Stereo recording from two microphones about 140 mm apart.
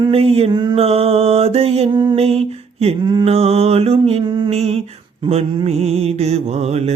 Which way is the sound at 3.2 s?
45° right (ahead or behind).